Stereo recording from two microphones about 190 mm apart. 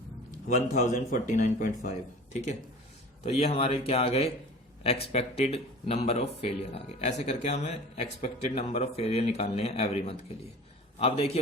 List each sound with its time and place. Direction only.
0.4 s a man's voice: 40° left (ahead or behind)